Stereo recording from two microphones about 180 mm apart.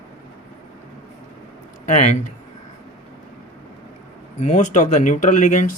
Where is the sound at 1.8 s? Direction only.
40° left (ahead or behind).